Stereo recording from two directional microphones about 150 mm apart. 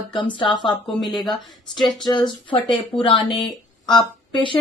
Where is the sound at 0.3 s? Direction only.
30° left (ahead or behind).